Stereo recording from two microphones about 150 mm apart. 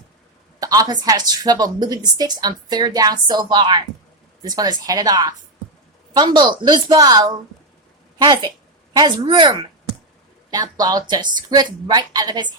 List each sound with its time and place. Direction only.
0.6 s a woman's voice: 25° right (ahead or behind)